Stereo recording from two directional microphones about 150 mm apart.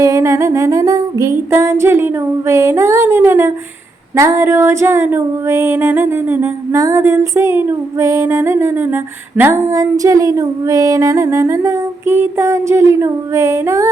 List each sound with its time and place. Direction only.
0.0 s female singing: 20° right (ahead or behind)